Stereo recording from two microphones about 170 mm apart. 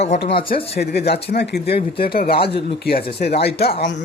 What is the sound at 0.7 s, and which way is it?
Speech, 70° left (ahead or behind).